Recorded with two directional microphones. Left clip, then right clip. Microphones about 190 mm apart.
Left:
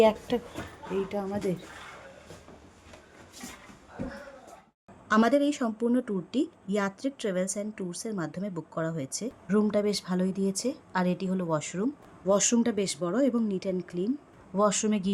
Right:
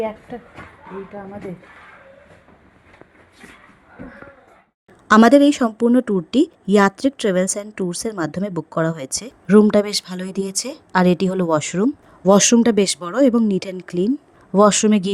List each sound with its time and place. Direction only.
0.0 s speech: 30° left (ahead or behind)
5.0 s speech: 50° right (ahead or behind)